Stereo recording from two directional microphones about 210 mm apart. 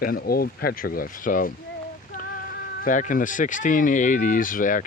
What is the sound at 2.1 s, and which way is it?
Music, 40° left (ahead or behind).